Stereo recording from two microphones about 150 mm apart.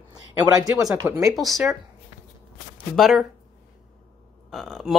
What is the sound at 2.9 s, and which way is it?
Speech, centre (ahead or behind).